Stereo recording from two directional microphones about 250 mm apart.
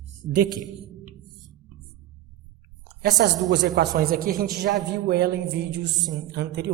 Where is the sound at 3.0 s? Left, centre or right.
Right.